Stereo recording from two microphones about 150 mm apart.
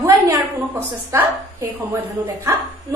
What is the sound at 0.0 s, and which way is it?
A woman's voice, 20° right (ahead or behind).